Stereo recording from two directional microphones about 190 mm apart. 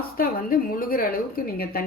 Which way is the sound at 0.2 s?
50° left (ahead or behind).